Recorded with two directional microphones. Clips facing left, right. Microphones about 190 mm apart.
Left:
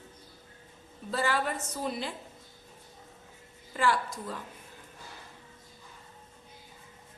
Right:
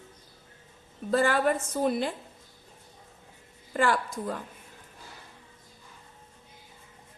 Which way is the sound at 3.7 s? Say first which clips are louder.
Right 3 dB; 50° right (ahead or behind).